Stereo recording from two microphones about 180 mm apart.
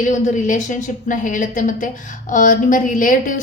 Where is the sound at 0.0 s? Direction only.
45° left (ahead or behind).